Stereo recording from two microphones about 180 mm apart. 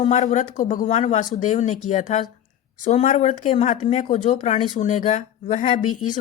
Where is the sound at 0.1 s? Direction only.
45° left (ahead or behind).